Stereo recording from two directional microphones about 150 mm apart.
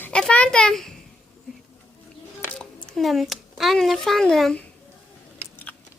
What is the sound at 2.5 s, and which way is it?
A child's voice, 5° left (ahead or behind).